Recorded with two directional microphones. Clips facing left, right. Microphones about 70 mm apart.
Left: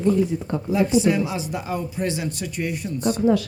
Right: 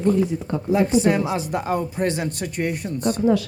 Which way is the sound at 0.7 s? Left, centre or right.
Right.